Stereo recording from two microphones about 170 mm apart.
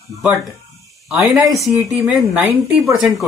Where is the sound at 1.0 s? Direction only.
5° right (ahead or behind).